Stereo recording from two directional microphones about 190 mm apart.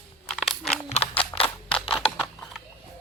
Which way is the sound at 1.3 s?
15° left (ahead or behind).